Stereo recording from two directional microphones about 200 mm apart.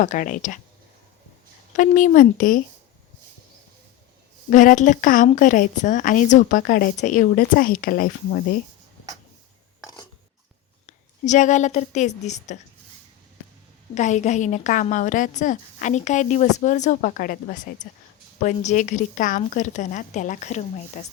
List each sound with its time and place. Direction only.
0.0 s a woman's voice: 40° left (ahead or behind)
1.7 s a woman's voice: 40° left (ahead or behind)
4.4 s a woman's voice: 40° left (ahead or behind)
10.8 s a woman's voice: 35° left (ahead or behind)
13.9 s a woman's voice: 35° left (ahead or behind)